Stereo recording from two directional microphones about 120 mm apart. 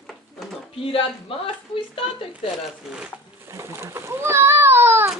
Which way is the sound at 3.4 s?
25° right (ahead or behind).